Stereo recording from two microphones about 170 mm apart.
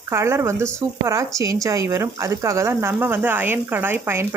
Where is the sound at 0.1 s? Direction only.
15° right (ahead or behind).